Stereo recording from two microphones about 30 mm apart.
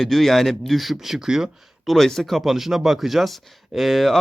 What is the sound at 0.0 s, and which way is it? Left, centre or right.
Speech, centre.